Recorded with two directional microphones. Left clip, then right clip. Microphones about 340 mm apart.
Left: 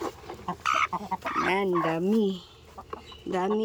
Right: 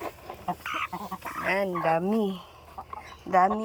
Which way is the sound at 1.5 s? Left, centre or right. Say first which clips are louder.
Right 3 dB; centre.